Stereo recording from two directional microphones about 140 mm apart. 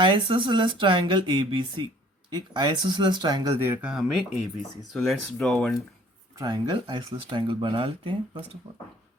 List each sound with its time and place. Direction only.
0.0 s speech: 35° right (ahead or behind); by 5.5 s centre (ahead or behind)
6.4 s speech: 35° right (ahead or behind)